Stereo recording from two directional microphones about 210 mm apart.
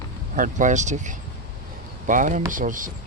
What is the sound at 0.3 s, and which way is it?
Speech, 40° right (ahead or behind).